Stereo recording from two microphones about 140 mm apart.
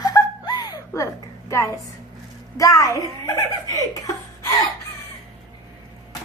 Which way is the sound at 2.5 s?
25° left (ahead or behind).